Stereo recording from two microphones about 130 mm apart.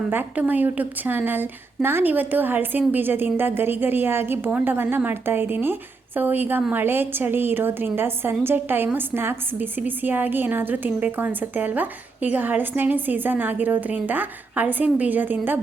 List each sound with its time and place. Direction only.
0.1 s a woman's voice: 15° right (ahead or behind)